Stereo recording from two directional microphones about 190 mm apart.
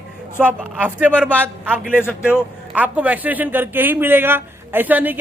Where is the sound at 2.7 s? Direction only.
10° right (ahead or behind).